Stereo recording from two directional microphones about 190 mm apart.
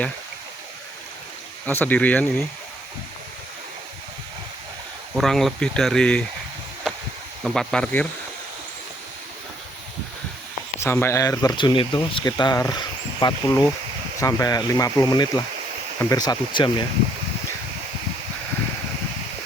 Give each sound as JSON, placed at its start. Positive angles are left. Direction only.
{"t": 1.6, "sound": "speech", "side_deg": 10}
{"t": 5.1, "sound": "speech", "side_deg": 0}
{"t": 7.4, "sound": "speech", "side_deg": 0}
{"t": 10.8, "sound": "speech", "side_deg": 15}